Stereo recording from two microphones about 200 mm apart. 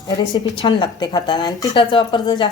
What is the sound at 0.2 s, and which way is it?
A woman's voice, 20° left (ahead or behind).